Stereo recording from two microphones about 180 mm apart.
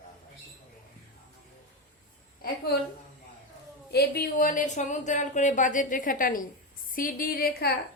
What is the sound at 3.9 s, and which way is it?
A woman's voice, 60° left (ahead or behind).